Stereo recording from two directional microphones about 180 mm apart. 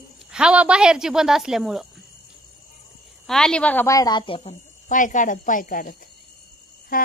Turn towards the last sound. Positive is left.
turn(degrees=50)  # may be behind; listen again after turning